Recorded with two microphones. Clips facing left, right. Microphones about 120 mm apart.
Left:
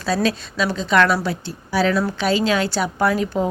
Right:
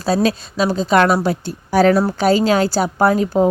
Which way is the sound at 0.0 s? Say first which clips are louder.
Right 4 dB; 40° right (ahead or behind).